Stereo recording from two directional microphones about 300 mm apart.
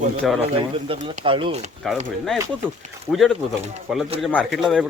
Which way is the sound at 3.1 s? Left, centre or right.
Centre.